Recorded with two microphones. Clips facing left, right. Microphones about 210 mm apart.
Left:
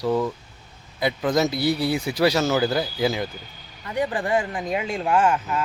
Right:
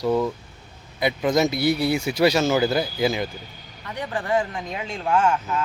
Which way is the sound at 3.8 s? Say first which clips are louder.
Left 3 dB; 10° left (ahead or behind).